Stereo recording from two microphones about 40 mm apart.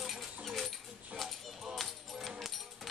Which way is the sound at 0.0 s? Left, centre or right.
Centre.